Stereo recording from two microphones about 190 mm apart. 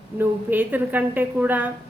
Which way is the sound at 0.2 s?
10° right (ahead or behind).